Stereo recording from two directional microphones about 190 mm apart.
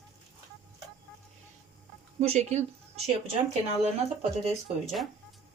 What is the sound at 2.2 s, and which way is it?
Speech, 35° right (ahead or behind).